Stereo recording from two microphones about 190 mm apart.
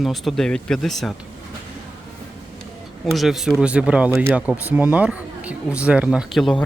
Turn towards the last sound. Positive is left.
turn(degrees=0)  # may be behind; listen again after turning